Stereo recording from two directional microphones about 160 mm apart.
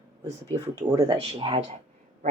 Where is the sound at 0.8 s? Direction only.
25° right (ahead or behind).